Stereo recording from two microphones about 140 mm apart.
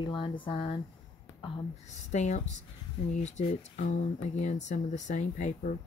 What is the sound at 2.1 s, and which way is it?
Speech, 55° left (ahead or behind).